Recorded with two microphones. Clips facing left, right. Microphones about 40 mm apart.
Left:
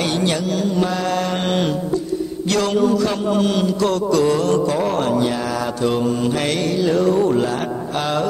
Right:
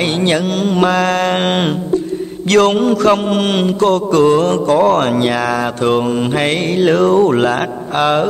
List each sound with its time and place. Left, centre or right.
0.2 s mantra: right
6.8 s mantra: right